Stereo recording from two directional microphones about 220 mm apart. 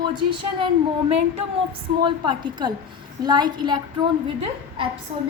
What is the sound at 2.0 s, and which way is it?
A woman's voice, 20° right (ahead or behind).